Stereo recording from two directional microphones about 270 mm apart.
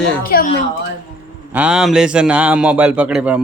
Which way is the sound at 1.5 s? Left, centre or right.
Centre.